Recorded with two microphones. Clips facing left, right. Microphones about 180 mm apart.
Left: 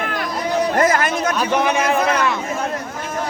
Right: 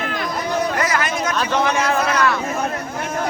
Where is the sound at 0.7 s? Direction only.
50° left (ahead or behind).